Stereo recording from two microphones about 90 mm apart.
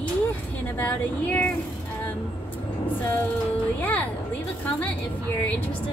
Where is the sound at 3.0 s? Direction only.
20° left (ahead or behind).